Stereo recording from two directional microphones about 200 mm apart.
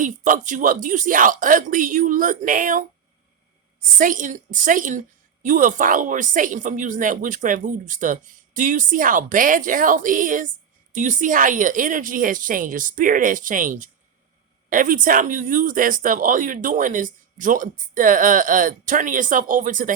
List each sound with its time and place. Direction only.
0.0 s a woman's voice: 40° right (ahead or behind)
3.9 s a woman's voice: 40° right (ahead or behind)